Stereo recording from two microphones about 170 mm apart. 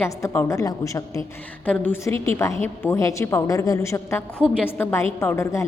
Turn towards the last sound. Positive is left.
turn(degrees=15)  # may be behind; listen again after turning